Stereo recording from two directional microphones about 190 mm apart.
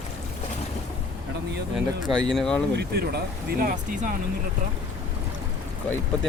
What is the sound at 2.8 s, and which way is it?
Speech, 55° right (ahead or behind).